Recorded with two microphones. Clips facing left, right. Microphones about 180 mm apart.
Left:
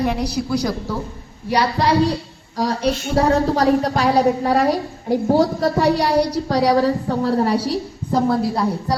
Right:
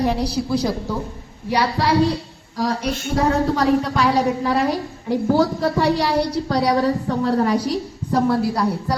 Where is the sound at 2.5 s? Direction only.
35° left (ahead or behind).